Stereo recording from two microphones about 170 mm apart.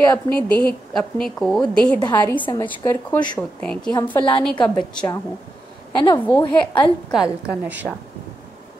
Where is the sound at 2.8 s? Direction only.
15° left (ahead or behind).